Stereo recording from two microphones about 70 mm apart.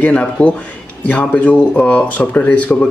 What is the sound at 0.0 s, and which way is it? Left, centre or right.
Speech, centre.